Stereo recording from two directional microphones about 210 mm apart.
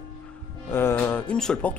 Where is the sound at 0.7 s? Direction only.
10° left (ahead or behind).